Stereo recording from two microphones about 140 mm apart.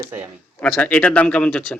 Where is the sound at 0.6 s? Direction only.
10° left (ahead or behind).